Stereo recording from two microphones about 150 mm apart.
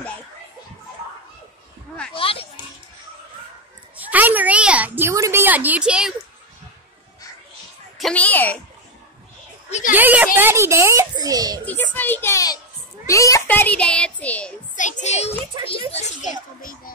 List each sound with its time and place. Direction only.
2.1 s a sound: 35° left (ahead or behind)
3.9 s a sound: 10° right (ahead or behind)
8.0 s child singing: 10° left (ahead or behind)
9.7 s speech: 50° left (ahead or behind)
9.9 s a child's voice: 10° right (ahead or behind)
11.6 s child singing: 10° left (ahead or behind)
13.0 s a child's voice: 20° left (ahead or behind)
13.5 s child singing: 10° left (ahead or behind)
14.8 s a child's voice: 55° left (ahead or behind)